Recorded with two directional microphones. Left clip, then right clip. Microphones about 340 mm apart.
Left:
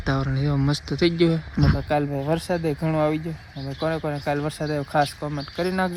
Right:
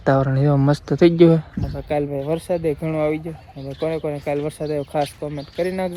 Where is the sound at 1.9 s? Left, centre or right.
Centre.